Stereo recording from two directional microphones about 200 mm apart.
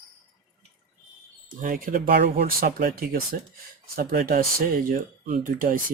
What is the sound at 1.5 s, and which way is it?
Speech, 45° right (ahead or behind).